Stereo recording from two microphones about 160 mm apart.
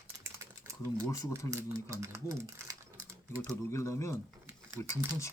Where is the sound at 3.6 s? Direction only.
15° left (ahead or behind).